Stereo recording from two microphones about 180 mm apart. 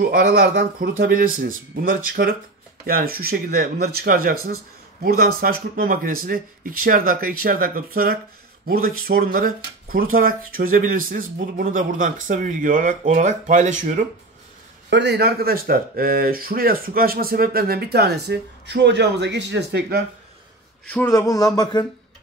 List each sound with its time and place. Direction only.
0.0 s speech: 55° right (ahead or behind)
14.9 s speech: 70° right (ahead or behind)
20.8 s speech: 10° left (ahead or behind)